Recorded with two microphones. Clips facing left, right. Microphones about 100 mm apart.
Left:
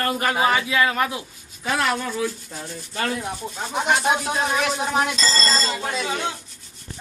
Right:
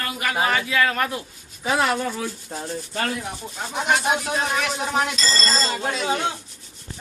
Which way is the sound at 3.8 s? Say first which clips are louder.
Left 1 dB; 25° left (ahead or behind).